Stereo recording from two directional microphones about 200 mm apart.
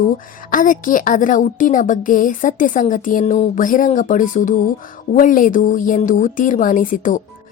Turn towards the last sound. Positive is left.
turn(degrees=40)  # may be behind; listen again after turning